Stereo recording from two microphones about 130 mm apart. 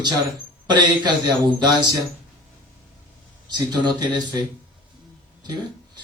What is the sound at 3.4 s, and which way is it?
Speech, 30° right (ahead or behind).